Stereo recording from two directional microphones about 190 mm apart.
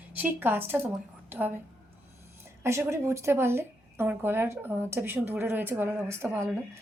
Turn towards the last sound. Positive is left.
turn(degrees=-15)  # may be behind; listen again after turning